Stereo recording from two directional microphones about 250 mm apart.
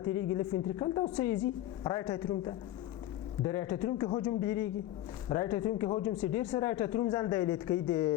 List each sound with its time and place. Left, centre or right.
0.0 s speech: centre